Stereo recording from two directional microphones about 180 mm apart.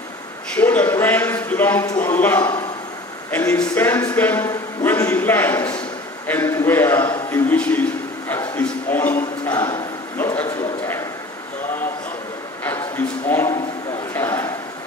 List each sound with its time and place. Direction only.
0.6 s a man's voice: 10° left (ahead or behind)
9.5 s speech: 20° left (ahead or behind)
10.1 s speech: 10° left (ahead or behind)
12.6 s a sound: 10° left (ahead or behind)